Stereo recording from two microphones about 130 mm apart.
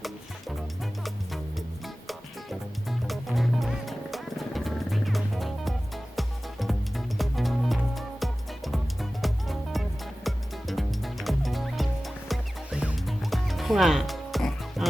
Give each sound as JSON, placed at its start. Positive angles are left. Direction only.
{"t": 1.0, "sound": "music", "side_deg": 0}
{"t": 3.1, "sound": "music", "side_deg": 0}